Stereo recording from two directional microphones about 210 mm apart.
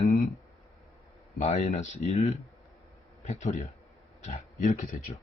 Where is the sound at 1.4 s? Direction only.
35° left (ahead or behind).